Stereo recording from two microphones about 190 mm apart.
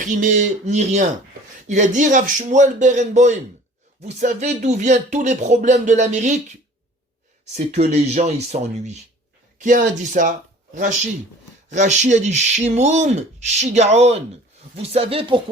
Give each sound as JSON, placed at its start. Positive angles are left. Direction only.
{"t": 0.0, "sound": "speech", "side_deg": -40}
{"t": 7.5, "sound": "speech", "side_deg": -35}